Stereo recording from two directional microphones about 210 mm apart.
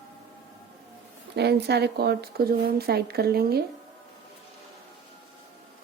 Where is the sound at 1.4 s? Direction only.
50° right (ahead or behind).